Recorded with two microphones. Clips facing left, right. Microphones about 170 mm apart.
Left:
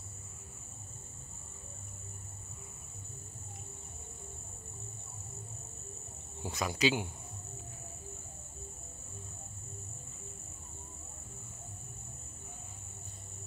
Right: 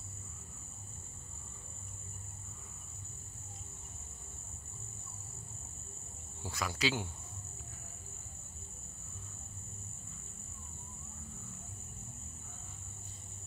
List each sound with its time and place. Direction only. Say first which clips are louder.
6.4 s speech: left 4 dB; 20° left (ahead or behind)